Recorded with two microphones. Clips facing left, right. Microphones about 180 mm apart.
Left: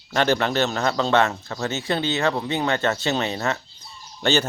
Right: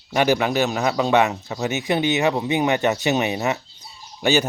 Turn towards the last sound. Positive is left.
turn(degrees=-15)  # may be behind; listen again after turning